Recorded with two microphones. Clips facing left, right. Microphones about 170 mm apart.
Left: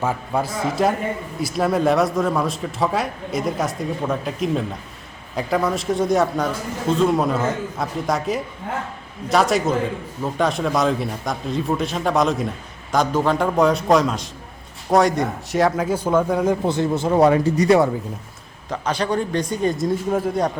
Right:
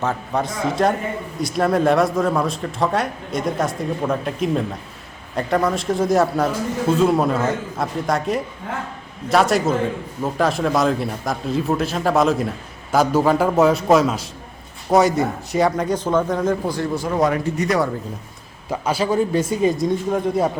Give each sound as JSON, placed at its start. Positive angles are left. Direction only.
{"t": 0.0, "sound": "speech", "side_deg": 10}
{"t": 16.6, "sound": "speech", "side_deg": 25}
{"t": 18.7, "sound": "speech", "side_deg": -5}